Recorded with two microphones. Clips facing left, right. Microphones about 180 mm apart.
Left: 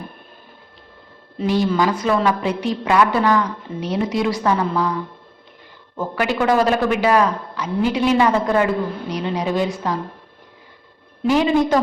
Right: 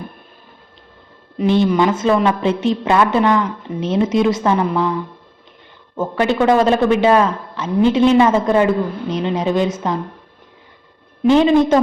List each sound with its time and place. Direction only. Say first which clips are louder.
1.4 s a man's voice: right 4 dB; 20° right (ahead or behind)
6.0 s a man's voice: right 4 dB; 25° right (ahead or behind)
11.2 s a man's voice: right 5 dB; 25° right (ahead or behind)